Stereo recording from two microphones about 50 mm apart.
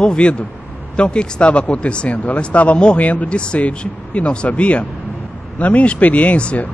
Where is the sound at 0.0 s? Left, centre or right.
Centre.